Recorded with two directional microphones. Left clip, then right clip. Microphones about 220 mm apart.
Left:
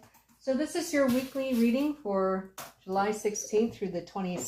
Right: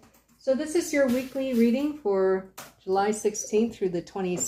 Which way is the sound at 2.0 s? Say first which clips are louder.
Right 5 dB; 50° right (ahead or behind).